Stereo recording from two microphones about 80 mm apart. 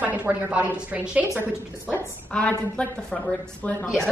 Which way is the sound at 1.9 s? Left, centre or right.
Centre.